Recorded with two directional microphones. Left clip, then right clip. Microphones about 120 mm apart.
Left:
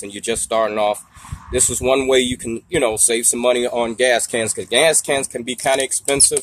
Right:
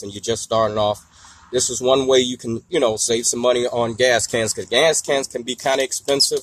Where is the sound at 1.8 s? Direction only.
10° left (ahead or behind).